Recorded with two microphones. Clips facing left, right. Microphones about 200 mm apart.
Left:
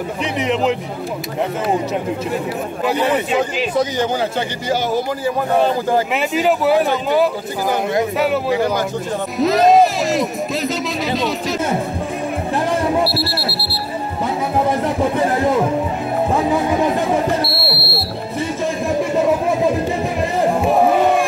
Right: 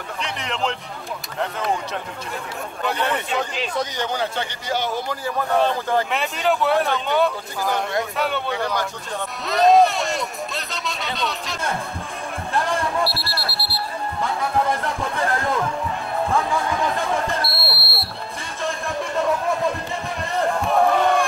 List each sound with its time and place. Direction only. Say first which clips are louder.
2.8 s speech: left 6 dB; 5° left (ahead or behind)
15.1 s speech: left 5 dB; 20° left (ahead or behind)
17.7 s speech: left 8 dB; centre (ahead or behind)
20.4 s a sound: left 4 dB; 20° left (ahead or behind)